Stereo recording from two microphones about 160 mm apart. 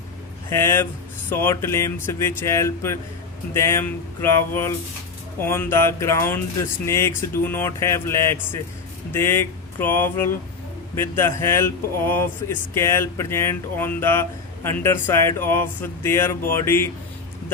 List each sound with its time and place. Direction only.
0.5 s speech: 15° left (ahead or behind)